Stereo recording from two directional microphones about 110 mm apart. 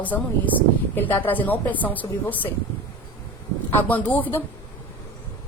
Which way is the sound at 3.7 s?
15° left (ahead or behind).